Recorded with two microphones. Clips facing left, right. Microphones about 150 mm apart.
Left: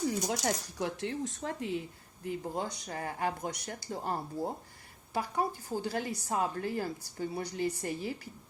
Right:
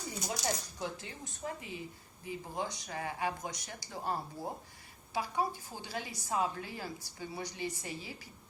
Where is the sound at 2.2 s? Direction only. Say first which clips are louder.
Left 4 dB; 50° left (ahead or behind).